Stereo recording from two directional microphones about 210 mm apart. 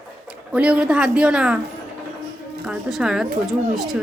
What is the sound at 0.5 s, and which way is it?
Speech, 5° right (ahead or behind).